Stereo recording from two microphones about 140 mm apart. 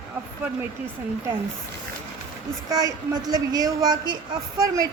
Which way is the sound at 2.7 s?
25° right (ahead or behind).